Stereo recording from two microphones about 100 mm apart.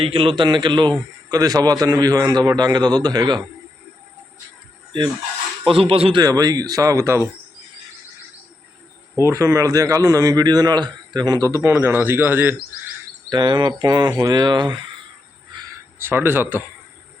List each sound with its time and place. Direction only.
0.0 s speech: 60° right (ahead or behind)
1.3 s a man's voice: 35° right (ahead or behind)
5.6 s speech: 65° right (ahead or behind)
6.2 s a man's voice: 40° right (ahead or behind)
9.2 s a man's voice: 30° right (ahead or behind)
11.6 s speech: 25° right (ahead or behind)
13.3 s speech: 50° right (ahead or behind)
16.0 s speech: 20° right (ahead or behind)